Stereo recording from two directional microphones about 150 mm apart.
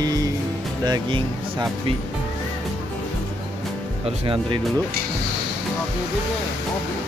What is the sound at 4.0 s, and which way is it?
Speech, 35° right (ahead or behind).